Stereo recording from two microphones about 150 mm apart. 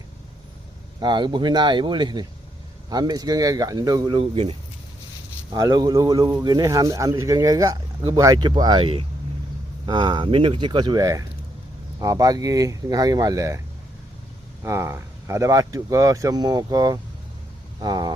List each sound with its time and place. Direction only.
1.0 s speech: 30° right (ahead or behind)
5.5 s speech: 25° right (ahead or behind)
14.6 s speech: 15° right (ahead or behind)